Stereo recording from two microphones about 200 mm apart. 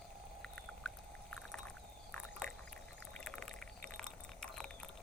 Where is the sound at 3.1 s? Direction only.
5° left (ahead or behind).